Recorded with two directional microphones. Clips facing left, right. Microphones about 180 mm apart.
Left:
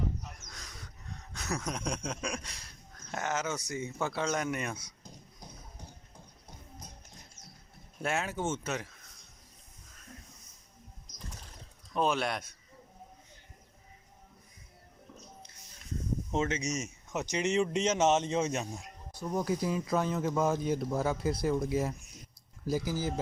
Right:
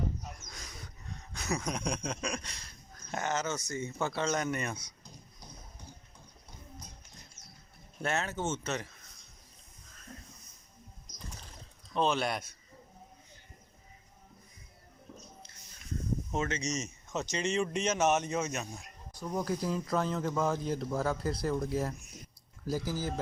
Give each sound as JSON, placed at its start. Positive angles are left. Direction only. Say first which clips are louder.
{"t": 1.3, "sound": "speech", "louder": "right 1 dB", "side_deg": 0}
{"t": 4.0, "sound": "speech", "louder": "even", "side_deg": 0}
{"t": 8.0, "sound": "speech", "louder": "left 1 dB", "side_deg": 10}
{"t": 11.9, "sound": "speech", "louder": "even", "side_deg": 5}
{"t": 16.3, "sound": "speech", "louder": "left 3 dB", "side_deg": 20}
{"t": 19.3, "sound": "speech", "louder": "left 2 dB", "side_deg": 5}